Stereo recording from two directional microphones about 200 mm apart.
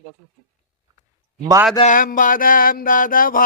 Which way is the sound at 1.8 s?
40° left (ahead or behind).